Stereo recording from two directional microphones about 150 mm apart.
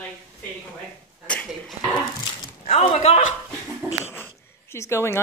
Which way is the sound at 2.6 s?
45° left (ahead or behind).